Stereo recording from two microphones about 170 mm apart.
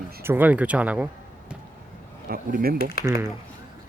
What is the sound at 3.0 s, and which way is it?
Speech, 60° left (ahead or behind).